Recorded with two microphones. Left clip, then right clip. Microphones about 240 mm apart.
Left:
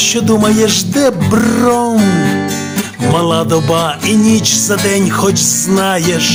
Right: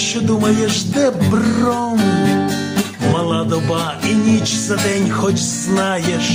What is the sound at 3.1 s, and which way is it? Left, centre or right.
Music, left.